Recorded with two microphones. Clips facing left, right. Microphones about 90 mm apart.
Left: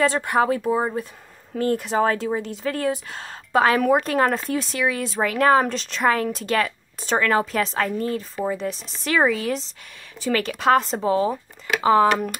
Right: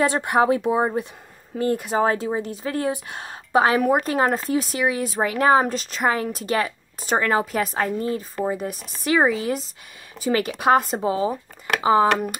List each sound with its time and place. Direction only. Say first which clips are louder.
0.0 s a woman's voice: right 1 dB; 15° right (ahead or behind)
8.6 s speech: left 2 dB; 50° right (ahead or behind)
9.0 s a woman's voice: right 1 dB; 5° right (ahead or behind)